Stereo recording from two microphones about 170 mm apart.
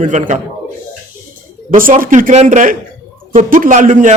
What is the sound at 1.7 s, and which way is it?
A man's voice, 55° right (ahead or behind).